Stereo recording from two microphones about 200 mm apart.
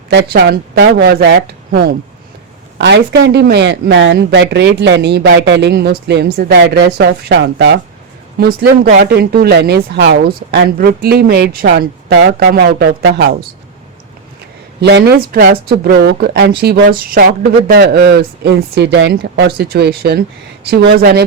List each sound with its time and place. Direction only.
0.1 s speech: 60° right (ahead or behind)
2.7 s speech: 60° right (ahead or behind)
8.8 s speech: 50° right (ahead or behind)
14.8 s speech: 55° right (ahead or behind)